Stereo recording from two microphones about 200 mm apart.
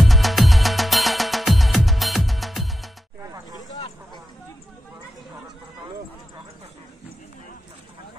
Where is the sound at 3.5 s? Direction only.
20° left (ahead or behind).